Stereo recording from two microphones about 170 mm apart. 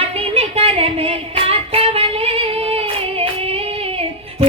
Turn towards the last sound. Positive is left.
turn(degrees=-35)  # may be behind; listen again after turning